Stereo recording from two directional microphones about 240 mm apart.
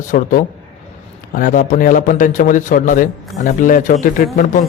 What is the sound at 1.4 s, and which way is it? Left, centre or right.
A man's voice, left.